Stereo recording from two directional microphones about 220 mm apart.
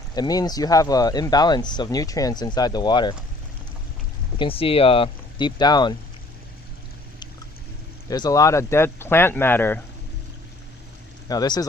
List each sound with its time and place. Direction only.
0.2 s speech: 15° left (ahead or behind)
4.4 s speech: 25° left (ahead or behind)
8.1 s speech: 15° left (ahead or behind)
11.3 s speech: 20° left (ahead or behind)